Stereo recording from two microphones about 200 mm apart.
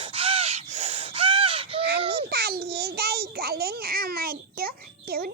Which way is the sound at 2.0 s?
30° right (ahead or behind).